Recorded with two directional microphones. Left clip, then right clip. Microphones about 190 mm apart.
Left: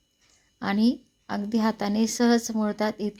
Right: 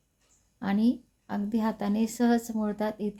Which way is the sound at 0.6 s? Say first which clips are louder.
Left 3 dB; 15° left (ahead or behind).